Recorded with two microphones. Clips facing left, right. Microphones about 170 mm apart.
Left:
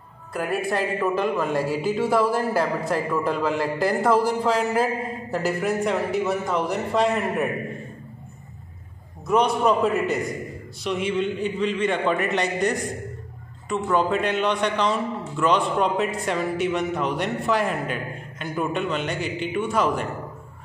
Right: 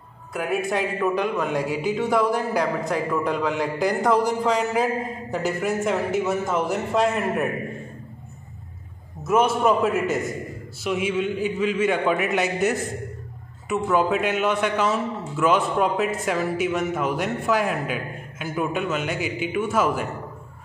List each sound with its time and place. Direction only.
0.3 s a man's voice: centre (ahead or behind)
9.2 s a man's voice: 5° right (ahead or behind)